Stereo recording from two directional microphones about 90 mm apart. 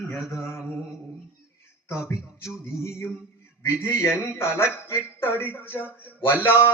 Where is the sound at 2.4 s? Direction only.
30° left (ahead or behind).